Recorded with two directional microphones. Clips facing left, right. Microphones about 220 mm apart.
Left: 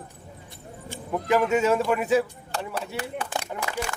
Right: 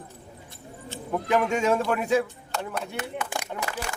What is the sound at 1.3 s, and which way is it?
Speech, 5° left (ahead or behind).